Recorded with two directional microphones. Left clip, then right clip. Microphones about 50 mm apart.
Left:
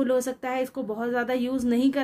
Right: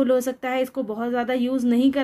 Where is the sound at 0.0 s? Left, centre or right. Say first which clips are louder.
Right 4 dB; right.